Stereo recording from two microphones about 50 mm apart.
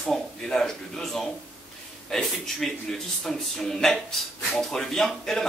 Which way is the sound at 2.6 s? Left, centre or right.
Centre.